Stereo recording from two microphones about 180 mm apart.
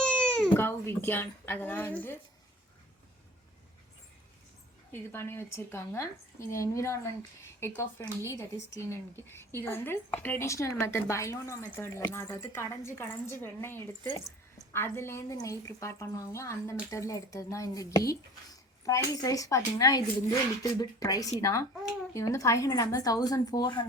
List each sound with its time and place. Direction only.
0.0 s speech: 5° left (ahead or behind)
4.9 s a woman's voice: 15° left (ahead or behind)